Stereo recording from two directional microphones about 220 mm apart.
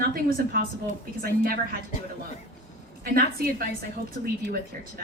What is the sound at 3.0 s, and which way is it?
Speech, 45° right (ahead or behind).